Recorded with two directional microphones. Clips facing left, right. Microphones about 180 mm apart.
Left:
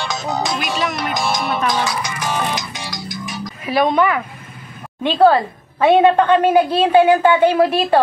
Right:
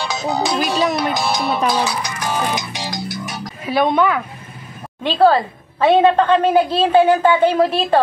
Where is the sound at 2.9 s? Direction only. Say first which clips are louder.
Right 2 dB; 70° right (ahead or behind).